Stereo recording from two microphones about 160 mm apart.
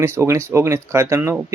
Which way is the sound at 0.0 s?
15° right (ahead or behind).